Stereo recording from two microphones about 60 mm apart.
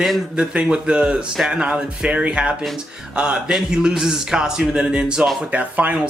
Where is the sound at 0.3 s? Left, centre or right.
Centre.